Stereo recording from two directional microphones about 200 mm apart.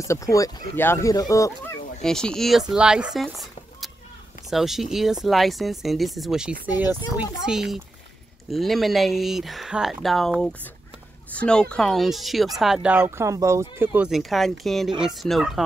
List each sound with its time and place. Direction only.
0.0 s speech: 15° left (ahead or behind)
2.0 s speech: 5° left (ahead or behind)